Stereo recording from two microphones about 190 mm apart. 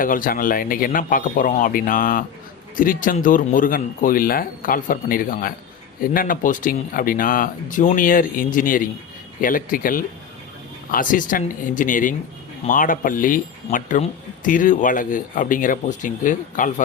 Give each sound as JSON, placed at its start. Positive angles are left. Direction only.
{"t": 0.0, "sound": "speech", "side_deg": 45}